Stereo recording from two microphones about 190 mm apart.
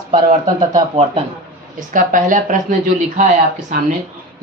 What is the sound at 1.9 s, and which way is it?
Speech, 45° right (ahead or behind).